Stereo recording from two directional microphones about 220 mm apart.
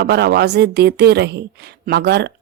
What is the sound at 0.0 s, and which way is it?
Speech, 50° right (ahead or behind).